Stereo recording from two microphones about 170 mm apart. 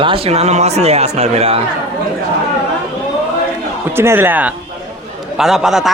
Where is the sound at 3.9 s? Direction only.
15° right (ahead or behind).